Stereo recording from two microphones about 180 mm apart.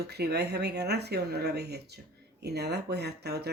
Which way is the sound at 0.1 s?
65° right (ahead or behind).